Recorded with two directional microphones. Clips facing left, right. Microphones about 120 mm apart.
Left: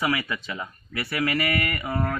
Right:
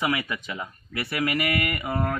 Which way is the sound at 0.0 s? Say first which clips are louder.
Left 1 dB; 20° right (ahead or behind).